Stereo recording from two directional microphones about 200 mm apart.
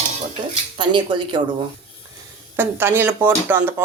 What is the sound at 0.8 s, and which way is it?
Speech, 25° right (ahead or behind).